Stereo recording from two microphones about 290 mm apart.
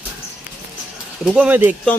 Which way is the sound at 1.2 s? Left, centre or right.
Centre.